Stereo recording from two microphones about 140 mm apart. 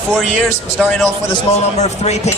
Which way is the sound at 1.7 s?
50° left (ahead or behind).